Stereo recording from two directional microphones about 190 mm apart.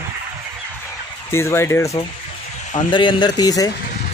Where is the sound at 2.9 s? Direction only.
25° left (ahead or behind).